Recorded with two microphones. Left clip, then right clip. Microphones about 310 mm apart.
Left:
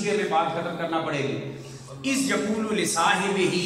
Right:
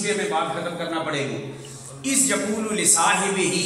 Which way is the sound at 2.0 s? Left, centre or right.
Centre.